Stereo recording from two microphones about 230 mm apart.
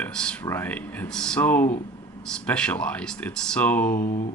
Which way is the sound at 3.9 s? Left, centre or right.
Left.